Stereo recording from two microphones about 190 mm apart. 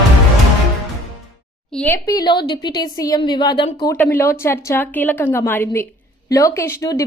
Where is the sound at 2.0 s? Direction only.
20° left (ahead or behind).